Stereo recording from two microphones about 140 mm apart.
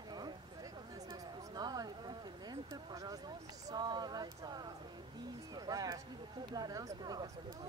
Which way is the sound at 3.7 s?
30° right (ahead or behind).